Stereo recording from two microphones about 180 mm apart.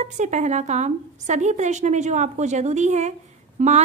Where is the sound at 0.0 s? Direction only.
40° right (ahead or behind).